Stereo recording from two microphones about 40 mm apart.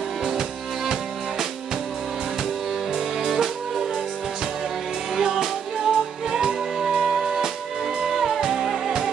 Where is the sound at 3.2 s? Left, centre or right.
Centre.